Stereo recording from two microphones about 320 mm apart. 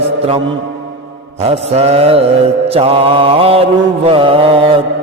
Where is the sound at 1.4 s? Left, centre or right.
Centre.